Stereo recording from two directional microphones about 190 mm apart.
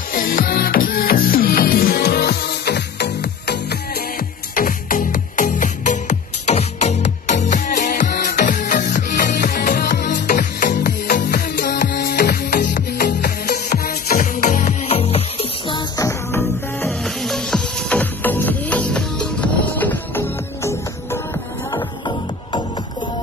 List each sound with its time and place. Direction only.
0.1 s music: 50° left (ahead or behind)
4.6 s music: 45° left (ahead or behind); by 15.8 s 30° left (ahead or behind)
16.0 s music: 15° left (ahead or behind)
16.8 s music: centre (ahead or behind)
21.7 s music: 25° left (ahead or behind)